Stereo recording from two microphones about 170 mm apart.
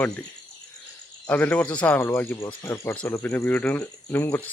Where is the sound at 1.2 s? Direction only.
10° left (ahead or behind).